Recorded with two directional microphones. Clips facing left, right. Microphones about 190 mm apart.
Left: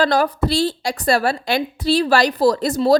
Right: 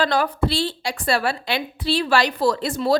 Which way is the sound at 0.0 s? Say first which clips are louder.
Left 3 dB; 40° left (ahead or behind).